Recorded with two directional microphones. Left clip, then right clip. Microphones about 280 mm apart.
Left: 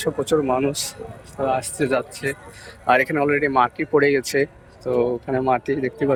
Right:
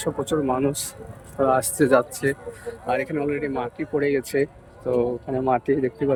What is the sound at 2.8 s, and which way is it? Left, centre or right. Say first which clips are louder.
Speech: left 7 dB; centre.